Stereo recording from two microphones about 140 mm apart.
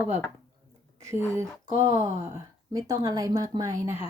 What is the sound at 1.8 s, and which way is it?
A woman's voice, 25° right (ahead or behind).